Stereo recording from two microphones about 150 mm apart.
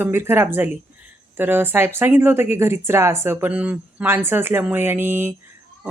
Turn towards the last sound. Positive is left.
turn(degrees=-15)  # may be behind; listen again after turning